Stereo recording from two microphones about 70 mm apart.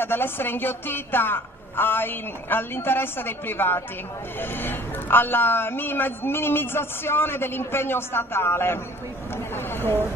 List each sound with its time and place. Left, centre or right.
0.0 s a man's voice: left